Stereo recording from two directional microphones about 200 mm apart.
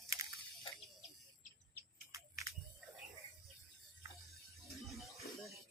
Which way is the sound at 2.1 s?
15° right (ahead or behind).